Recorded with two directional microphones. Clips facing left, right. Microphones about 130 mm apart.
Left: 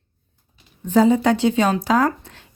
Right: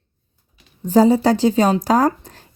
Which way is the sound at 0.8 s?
35° right (ahead or behind).